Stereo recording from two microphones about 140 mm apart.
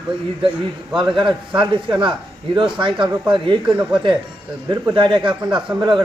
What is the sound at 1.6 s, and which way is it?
Speech, 35° right (ahead or behind).